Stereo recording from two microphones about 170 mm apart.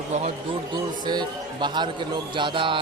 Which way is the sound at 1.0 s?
25° right (ahead or behind).